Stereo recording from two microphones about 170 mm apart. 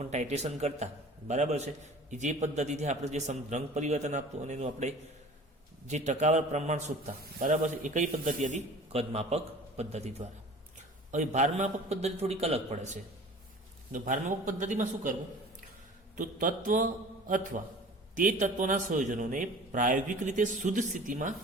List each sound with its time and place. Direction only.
0.0 s a man's voice: 40° right (ahead or behind)
16.1 s a man's voice: 50° right (ahead or behind)